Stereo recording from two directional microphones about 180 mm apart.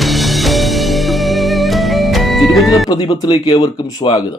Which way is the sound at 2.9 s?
25° left (ahead or behind).